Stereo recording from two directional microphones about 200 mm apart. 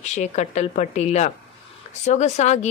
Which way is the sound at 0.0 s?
35° left (ahead or behind).